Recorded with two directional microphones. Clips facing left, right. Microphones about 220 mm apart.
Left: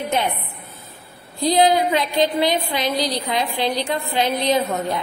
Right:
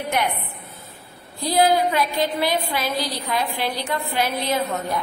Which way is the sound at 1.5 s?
20° left (ahead or behind).